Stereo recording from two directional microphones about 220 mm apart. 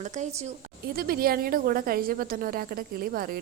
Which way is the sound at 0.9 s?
40° right (ahead or behind).